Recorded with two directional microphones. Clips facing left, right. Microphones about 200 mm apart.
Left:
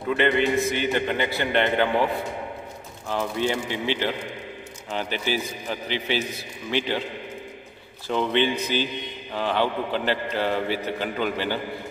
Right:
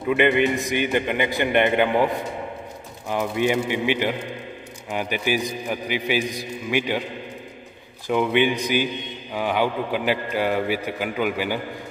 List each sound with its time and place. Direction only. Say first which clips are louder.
0.1 s a man's voice: right 2 dB; 15° right (ahead or behind)
8.1 s a man's voice: right 3 dB; 10° right (ahead or behind)